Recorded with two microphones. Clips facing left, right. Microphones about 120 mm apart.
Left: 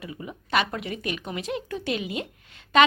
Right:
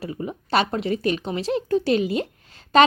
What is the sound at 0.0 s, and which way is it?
Speech, 35° right (ahead or behind).